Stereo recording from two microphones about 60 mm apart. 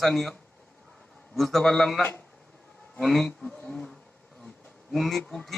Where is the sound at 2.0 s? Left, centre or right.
Left.